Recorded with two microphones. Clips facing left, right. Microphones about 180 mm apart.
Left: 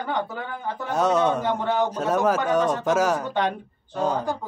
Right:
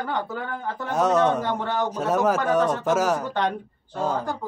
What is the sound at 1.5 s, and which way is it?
Speech, 5° left (ahead or behind).